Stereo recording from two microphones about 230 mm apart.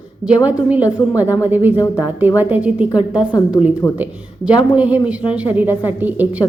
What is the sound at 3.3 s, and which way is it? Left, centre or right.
Speech, centre.